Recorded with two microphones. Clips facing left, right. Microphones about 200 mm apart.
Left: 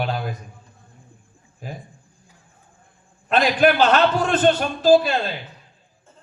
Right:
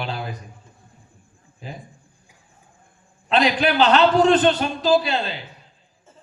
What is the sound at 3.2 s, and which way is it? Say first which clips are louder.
A man's voice: left 2 dB; 45° left (ahead or behind).